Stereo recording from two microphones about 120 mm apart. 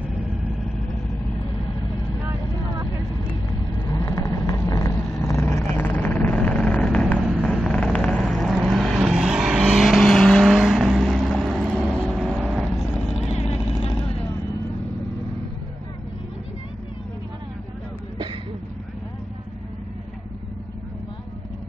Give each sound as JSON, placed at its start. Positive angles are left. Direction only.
{"t": 3.8, "sound": "vehicle", "side_deg": 35}
{"t": 4.9, "sound": "vehicle", "side_deg": 5}
{"t": 5.2, "sound": "vehicle", "side_deg": 25}
{"t": 12.0, "sound": "vehicle", "side_deg": -10}
{"t": 13.3, "sound": "vehicle", "side_deg": 60}